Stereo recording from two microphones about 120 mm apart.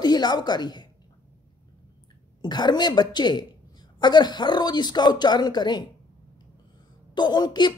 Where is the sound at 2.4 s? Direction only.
35° left (ahead or behind).